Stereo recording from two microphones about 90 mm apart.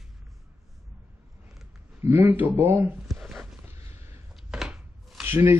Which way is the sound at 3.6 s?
30° right (ahead or behind).